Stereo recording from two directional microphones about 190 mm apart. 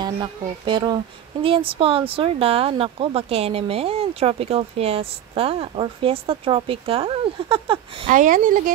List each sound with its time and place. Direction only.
0.0 s speech: 20° right (ahead or behind)
8.1 s speech: 45° right (ahead or behind)